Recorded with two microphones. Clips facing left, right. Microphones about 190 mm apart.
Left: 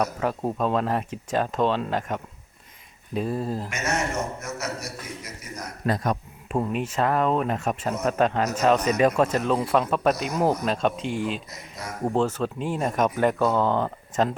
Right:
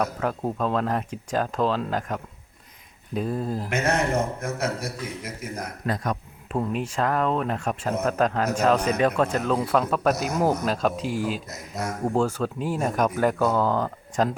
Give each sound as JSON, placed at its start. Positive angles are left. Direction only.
{"t": 0.0, "sound": "speech", "side_deg": 5}
{"t": 3.7, "sound": "a man's voice", "side_deg": -55}
{"t": 5.4, "sound": "a man's voice", "side_deg": -55}
{"t": 5.8, "sound": "speech", "side_deg": 30}
{"t": 6.5, "sound": "speech", "side_deg": 10}